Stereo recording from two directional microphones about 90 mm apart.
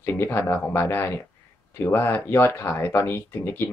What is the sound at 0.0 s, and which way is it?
Speech, 25° left (ahead or behind).